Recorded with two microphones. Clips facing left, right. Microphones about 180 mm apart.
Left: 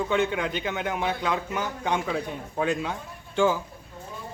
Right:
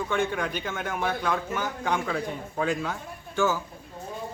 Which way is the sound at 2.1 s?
5° left (ahead or behind).